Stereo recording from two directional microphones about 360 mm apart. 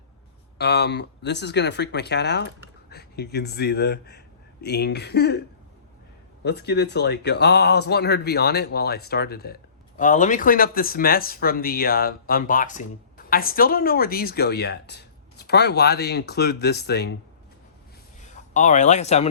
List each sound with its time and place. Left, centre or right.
0.6 s speech: left
6.4 s speech: left
18.2 s a man's voice: centre